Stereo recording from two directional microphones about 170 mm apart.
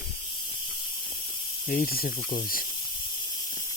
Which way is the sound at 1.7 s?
60° left (ahead or behind).